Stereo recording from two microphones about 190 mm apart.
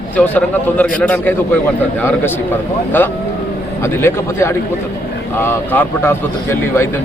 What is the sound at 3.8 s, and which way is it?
A man's voice, 15° left (ahead or behind).